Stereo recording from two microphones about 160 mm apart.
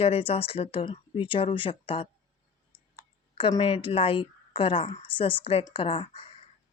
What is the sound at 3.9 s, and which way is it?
Speech, 35° left (ahead or behind).